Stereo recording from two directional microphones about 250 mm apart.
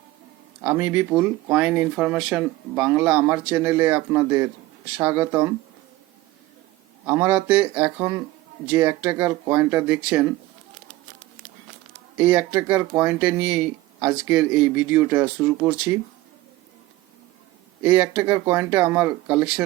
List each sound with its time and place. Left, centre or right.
0.6 s speech: centre
7.0 s speech: centre
12.1 s speech: centre
17.8 s speech: centre